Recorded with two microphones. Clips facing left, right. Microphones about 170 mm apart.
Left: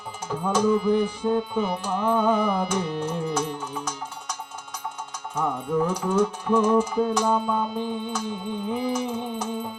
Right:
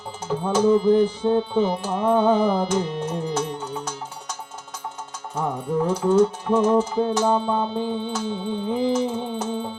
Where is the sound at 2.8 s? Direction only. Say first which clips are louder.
Right 1 dB; 10° left (ahead or behind).